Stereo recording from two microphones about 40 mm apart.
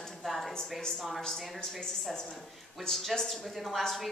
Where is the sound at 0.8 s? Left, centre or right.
Centre.